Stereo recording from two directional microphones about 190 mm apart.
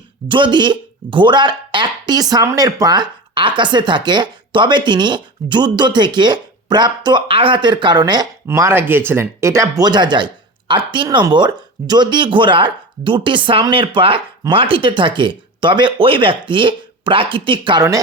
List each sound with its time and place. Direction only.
0.3 s speech: 25° right (ahead or behind)